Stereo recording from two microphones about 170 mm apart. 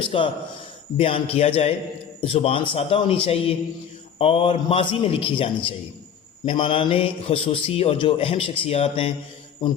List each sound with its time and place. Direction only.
0.1 s a man's voice: 35° left (ahead or behind)